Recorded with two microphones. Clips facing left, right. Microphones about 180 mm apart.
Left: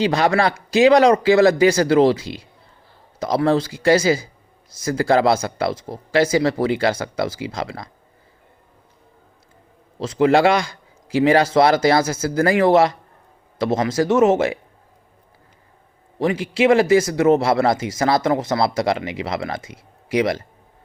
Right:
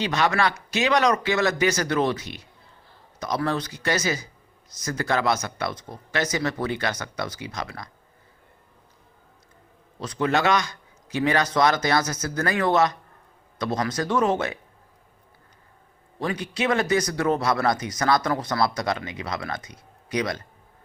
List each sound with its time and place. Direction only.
0.0 s speech: 35° left (ahead or behind)
10.0 s speech: 25° left (ahead or behind)
16.2 s speech: 25° left (ahead or behind)